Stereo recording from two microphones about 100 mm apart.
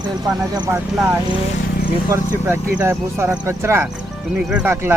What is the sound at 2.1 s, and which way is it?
Speech, 25° right (ahead or behind).